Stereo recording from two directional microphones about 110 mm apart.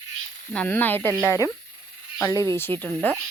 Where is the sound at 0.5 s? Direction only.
15° left (ahead or behind).